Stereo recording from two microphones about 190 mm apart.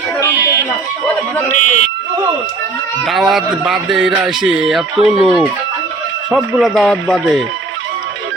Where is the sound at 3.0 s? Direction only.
Centre (ahead or behind).